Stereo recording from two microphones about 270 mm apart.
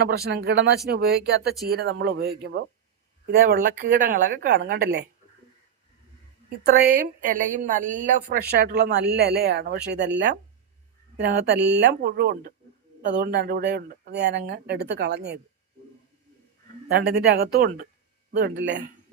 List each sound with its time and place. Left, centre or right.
0.3 s a woman's voice: right
6.7 s a woman's voice: right
16.9 s a woman's voice: right